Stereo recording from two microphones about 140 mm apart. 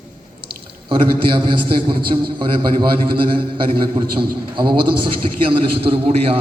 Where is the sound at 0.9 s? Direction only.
35° right (ahead or behind).